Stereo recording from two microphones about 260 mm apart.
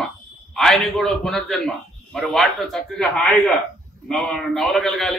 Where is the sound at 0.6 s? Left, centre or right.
Centre.